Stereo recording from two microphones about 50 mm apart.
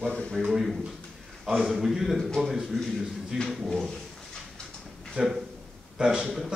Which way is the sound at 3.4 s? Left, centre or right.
Centre.